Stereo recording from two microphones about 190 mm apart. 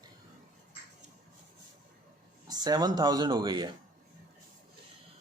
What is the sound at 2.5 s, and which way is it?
Speech, 20° right (ahead or behind).